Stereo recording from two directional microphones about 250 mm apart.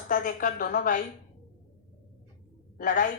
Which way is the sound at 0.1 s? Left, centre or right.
Left.